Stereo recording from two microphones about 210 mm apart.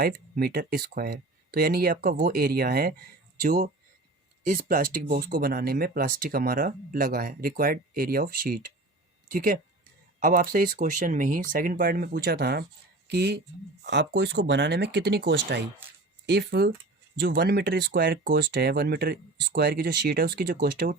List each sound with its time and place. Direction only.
0.0 s speech: 45° right (ahead or behind)